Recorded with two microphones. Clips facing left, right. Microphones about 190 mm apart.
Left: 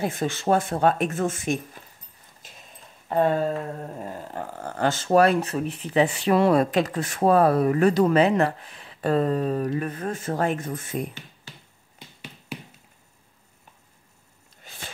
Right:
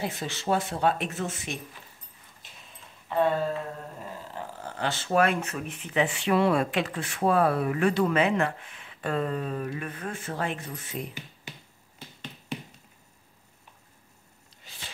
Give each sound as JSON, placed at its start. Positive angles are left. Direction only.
{"t": 0.0, "sound": "speech", "side_deg": 50}
{"t": 3.1, "sound": "speech", "side_deg": 45}
{"t": 14.6, "sound": "a sound", "side_deg": 50}